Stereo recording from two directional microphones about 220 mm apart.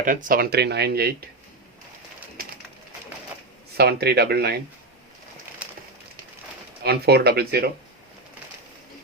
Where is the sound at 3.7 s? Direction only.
45° right (ahead or behind).